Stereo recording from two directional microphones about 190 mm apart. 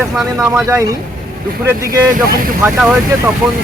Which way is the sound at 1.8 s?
50° right (ahead or behind).